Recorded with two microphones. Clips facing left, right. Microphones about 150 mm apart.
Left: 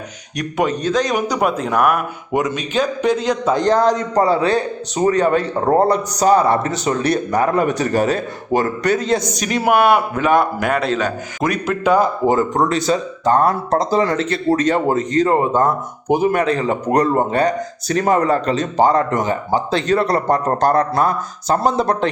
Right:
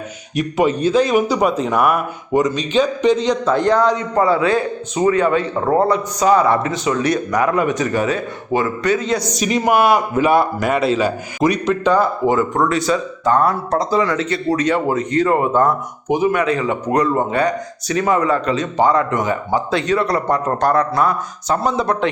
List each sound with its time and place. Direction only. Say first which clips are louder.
0.3 s a man's voice: right 3 dB; 5° right (ahead or behind)
3.6 s speech: even; 40° left (ahead or behind)
9.3 s a man's voice: right 4 dB; centre (ahead or behind)
12.2 s speech: even; 35° left (ahead or behind)
13.9 s speech: left 1 dB; 40° left (ahead or behind)